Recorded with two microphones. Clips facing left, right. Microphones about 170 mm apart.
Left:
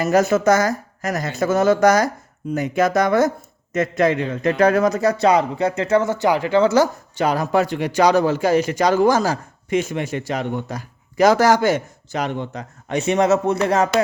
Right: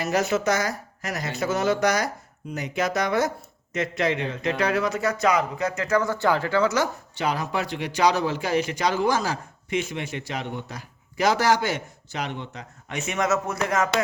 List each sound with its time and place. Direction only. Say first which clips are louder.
0.0 s a man's voice: left 7 dB; 50° left (ahead or behind); by 6.6 s 15° left (ahead or behind)
6.6 s speech: left 10 dB; 30° left (ahead or behind)
7.2 s a man's voice: left 8 dB; 45° left (ahead or behind)